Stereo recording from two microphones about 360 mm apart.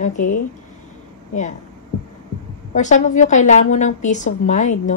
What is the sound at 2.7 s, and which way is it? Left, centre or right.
A woman's voice, centre.